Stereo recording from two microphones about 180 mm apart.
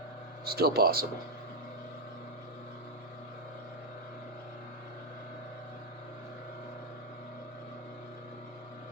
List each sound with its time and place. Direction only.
0.4 s speech: 60° right (ahead or behind)